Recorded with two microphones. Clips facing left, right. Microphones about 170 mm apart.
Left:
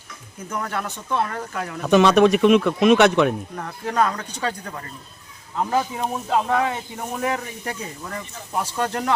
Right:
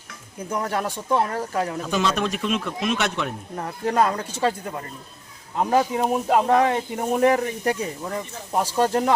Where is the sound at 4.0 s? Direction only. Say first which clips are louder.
Left 1 dB; 5° right (ahead or behind).